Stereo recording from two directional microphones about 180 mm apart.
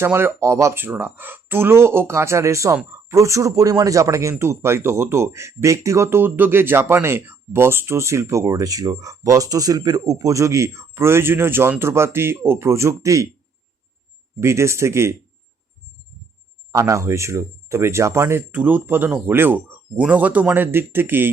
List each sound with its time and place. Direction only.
0.0 s speech: 10° right (ahead or behind)
14.4 s speech: 15° right (ahead or behind)
16.7 s speech: 15° right (ahead or behind)